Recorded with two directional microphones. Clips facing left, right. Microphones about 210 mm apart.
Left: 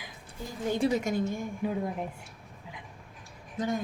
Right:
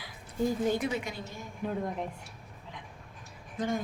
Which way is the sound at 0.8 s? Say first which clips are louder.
Left 7 dB; 40° left (ahead or behind).